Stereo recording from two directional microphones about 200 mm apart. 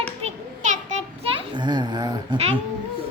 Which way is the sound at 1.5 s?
20° right (ahead or behind).